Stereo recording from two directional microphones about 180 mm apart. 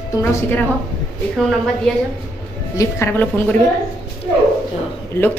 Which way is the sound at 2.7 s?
10° left (ahead or behind).